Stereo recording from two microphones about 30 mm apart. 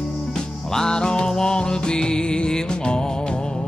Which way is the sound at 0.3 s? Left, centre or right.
Left.